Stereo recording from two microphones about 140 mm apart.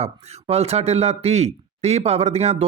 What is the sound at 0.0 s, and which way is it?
Speech, 45° right (ahead or behind).